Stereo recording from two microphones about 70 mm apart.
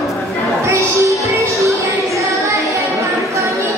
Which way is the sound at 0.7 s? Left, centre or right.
Right.